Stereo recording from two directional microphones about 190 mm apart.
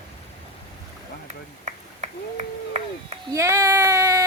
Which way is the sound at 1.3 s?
35° right (ahead or behind).